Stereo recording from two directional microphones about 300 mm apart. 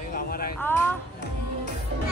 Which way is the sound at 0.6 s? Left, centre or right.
Centre.